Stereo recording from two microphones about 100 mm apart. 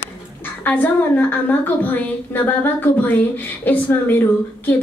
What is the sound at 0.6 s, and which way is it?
A woman's voice, 20° left (ahead or behind).